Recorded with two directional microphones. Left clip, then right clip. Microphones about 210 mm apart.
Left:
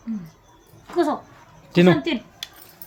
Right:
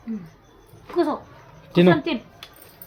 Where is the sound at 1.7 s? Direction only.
5° left (ahead or behind).